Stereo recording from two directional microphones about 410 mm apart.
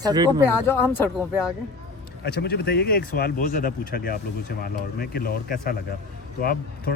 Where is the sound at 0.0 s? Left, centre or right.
Centre.